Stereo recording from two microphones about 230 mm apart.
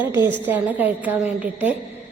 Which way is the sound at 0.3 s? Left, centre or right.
Centre.